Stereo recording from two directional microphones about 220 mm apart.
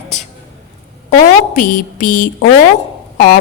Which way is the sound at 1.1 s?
35° left (ahead or behind).